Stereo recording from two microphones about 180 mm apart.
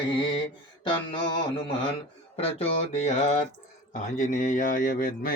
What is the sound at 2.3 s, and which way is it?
A man's voice, 35° left (ahead or behind).